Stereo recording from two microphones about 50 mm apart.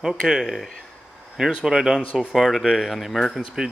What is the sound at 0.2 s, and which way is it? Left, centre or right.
Speech, centre.